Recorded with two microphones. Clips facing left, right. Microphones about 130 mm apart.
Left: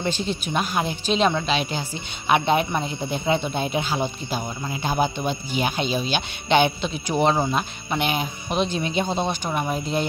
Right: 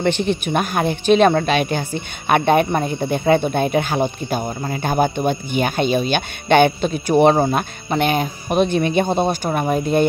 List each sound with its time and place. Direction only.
0.0 s speech: 65° right (ahead or behind)